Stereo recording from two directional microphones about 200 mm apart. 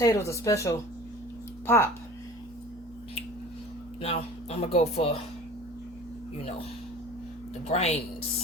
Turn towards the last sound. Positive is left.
turn(degrees=35)  # may be behind; listen again after turning